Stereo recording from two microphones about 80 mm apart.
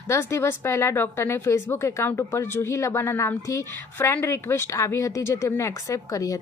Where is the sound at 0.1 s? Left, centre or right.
Left.